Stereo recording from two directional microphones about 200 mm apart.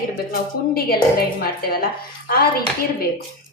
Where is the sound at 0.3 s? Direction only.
50° left (ahead or behind).